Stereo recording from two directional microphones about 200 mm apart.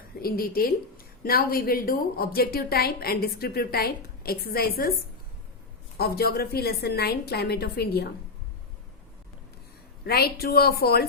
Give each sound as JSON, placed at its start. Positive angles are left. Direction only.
{"t": 0.2, "sound": "a woman's voice", "side_deg": 50}
{"t": 6.0, "sound": "a woman's voice", "side_deg": 50}
{"t": 10.0, "sound": "a woman's voice", "side_deg": 50}